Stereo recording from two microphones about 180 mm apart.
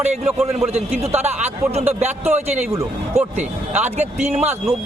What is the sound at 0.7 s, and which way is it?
Speech, 35° right (ahead or behind).